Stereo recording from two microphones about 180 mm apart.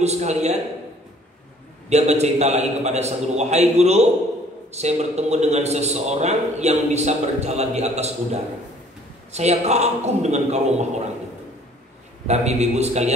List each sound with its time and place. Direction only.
0.0 s a man's voice: 40° right (ahead or behind)
1.9 s a man's voice: 40° right (ahead or behind)
12.3 s a man's voice: 40° right (ahead or behind)